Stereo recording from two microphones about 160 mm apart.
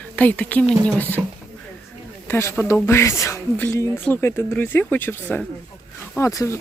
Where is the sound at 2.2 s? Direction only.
15° left (ahead or behind).